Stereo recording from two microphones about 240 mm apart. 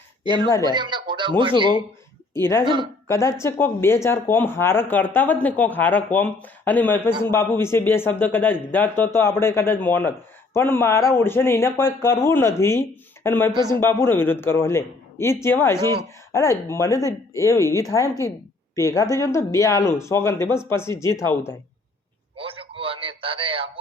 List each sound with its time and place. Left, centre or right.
0.6 s speech: centre
2.3 s speech: centre
2.6 s a woman's voice: centre
3.1 s speech: centre
22.4 s a sound: right